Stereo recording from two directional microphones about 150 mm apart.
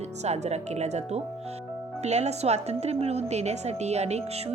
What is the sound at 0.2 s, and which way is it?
A woman's voice, 45° right (ahead or behind).